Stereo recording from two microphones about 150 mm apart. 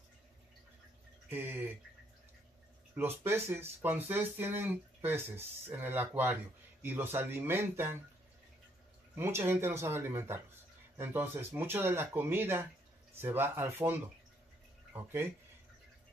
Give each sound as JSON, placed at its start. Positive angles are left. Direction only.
{"t": 1.3, "sound": "speech", "side_deg": -15}
{"t": 3.0, "sound": "speech", "side_deg": -15}
{"t": 9.1, "sound": "speech", "side_deg": -15}